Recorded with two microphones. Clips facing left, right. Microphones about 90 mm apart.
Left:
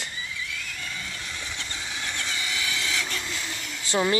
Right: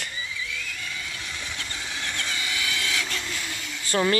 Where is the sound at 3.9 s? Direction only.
10° left (ahead or behind).